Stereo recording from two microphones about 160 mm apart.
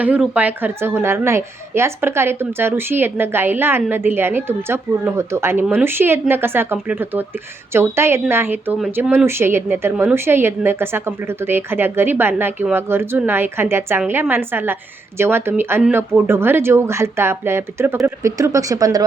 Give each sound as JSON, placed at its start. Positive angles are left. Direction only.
{"t": 0.0, "sound": "a woman's voice", "side_deg": -10}